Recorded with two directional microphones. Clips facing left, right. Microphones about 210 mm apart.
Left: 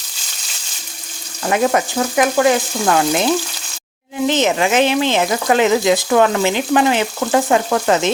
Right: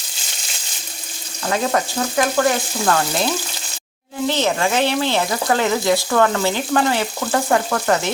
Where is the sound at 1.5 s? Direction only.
15° left (ahead or behind).